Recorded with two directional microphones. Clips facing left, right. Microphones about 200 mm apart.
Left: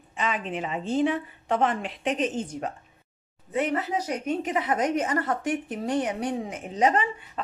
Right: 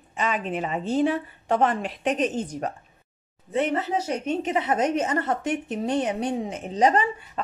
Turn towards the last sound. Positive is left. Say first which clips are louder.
# right 2 dB
turn(degrees=-35)  # may be behind; listen again after turning